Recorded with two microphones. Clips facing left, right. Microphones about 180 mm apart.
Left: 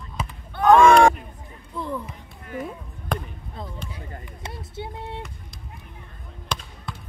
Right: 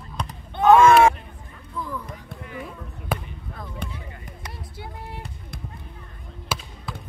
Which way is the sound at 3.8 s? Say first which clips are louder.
Right 4 dB; 55° right (ahead or behind).